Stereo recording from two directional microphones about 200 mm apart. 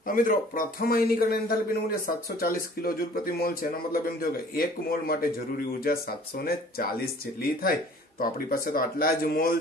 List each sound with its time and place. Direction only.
0.0 s a man's voice: 45° left (ahead or behind)
8.2 s a man's voice: 45° left (ahead or behind)